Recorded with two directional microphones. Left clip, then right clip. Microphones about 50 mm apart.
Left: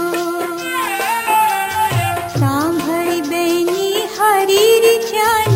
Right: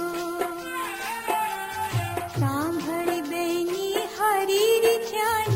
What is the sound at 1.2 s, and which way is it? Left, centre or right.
Music, centre.